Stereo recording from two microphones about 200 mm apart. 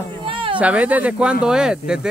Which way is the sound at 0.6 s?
5° right (ahead or behind).